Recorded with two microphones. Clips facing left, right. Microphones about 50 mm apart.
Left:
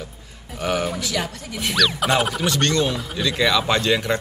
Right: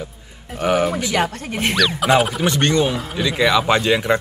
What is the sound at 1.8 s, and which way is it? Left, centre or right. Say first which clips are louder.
Speech: even; centre.